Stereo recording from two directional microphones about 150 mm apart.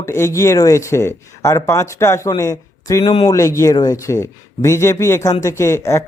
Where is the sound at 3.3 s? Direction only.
20° left (ahead or behind).